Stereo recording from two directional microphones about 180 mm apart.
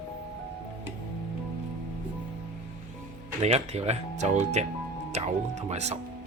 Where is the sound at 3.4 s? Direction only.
35° right (ahead or behind).